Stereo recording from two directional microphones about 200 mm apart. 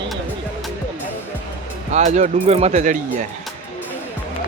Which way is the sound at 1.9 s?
35° right (ahead or behind).